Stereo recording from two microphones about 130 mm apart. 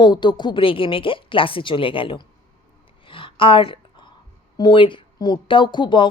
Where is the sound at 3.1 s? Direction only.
40° left (ahead or behind).